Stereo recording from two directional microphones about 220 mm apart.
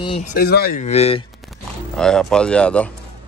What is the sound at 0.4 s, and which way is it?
Speech, 45° left (ahead or behind).